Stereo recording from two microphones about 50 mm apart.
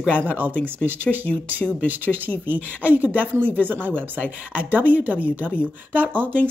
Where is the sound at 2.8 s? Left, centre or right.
Right.